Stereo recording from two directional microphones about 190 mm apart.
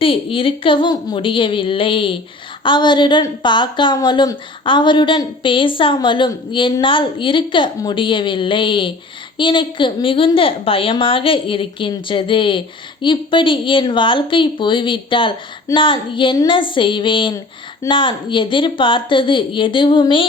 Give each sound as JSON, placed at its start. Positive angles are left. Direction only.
{"t": 0.0, "sound": "a woman's voice", "side_deg": 30}